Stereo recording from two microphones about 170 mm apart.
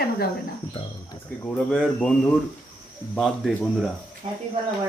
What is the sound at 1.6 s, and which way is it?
Speech, centre (ahead or behind).